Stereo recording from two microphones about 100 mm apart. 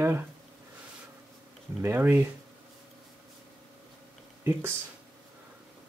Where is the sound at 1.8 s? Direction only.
25° right (ahead or behind).